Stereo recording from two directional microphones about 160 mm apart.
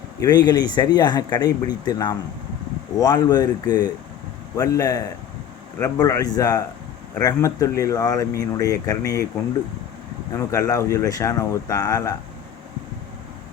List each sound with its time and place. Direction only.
0.2 s speech: 25° left (ahead or behind)
10.3 s speech: 20° left (ahead or behind)